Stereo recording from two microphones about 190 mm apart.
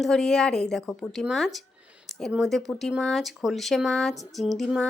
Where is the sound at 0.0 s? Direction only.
5° left (ahead or behind).